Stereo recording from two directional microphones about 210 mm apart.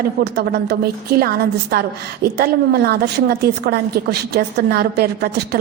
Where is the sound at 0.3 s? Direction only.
50° right (ahead or behind).